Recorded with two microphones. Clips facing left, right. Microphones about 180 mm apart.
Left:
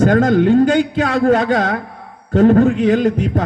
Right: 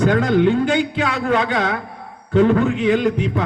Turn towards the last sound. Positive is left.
turn(degrees=45)  # may be behind; listen again after turning